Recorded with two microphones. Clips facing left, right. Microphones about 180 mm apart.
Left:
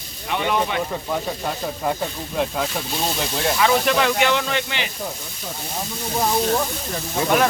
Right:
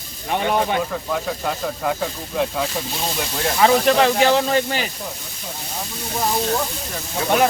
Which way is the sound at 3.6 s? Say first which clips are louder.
Right 4 dB; 35° right (ahead or behind).